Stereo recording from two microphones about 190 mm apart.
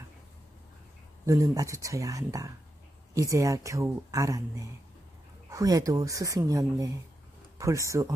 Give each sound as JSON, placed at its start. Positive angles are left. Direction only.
{"t": 1.2, "sound": "speech", "side_deg": -15}